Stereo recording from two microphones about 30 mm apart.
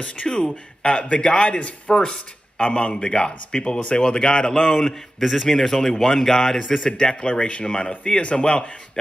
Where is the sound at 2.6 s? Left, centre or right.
Left.